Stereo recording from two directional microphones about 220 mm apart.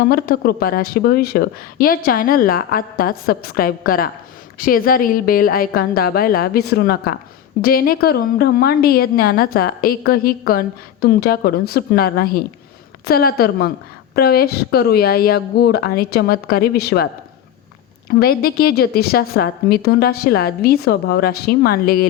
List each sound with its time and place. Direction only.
0.0 s a woman's voice: 45° left (ahead or behind)
18.1 s a woman's voice: 45° left (ahead or behind)